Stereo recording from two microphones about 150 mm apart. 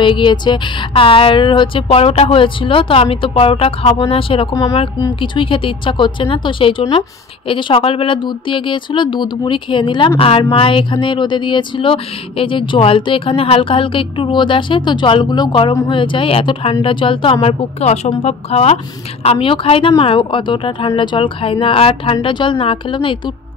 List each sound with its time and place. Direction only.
0.0 s a woman's voice: 30° left (ahead or behind)